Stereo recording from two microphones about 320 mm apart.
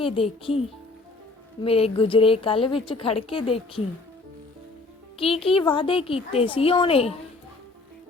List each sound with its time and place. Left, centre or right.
0.0 s a woman's voice: centre
1.6 s a woman's voice: centre
5.1 s a woman's voice: centre